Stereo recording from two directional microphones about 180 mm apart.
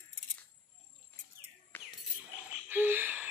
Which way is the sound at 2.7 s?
10° right (ahead or behind).